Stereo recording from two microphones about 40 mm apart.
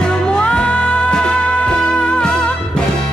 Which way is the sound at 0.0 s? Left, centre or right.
Left.